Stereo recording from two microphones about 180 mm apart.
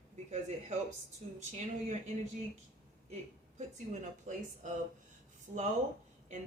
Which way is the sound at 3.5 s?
40° right (ahead or behind).